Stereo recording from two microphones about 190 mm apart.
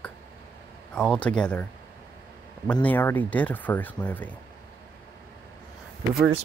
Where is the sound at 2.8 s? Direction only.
10° left (ahead or behind).